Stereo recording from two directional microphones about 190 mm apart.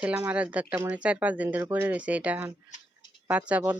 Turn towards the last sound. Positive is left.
turn(degrees=-5)  # may be behind; listen again after turning